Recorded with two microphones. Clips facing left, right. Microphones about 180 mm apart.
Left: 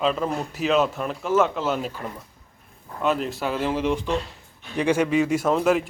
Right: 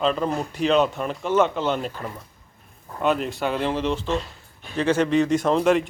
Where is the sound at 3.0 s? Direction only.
Centre (ahead or behind).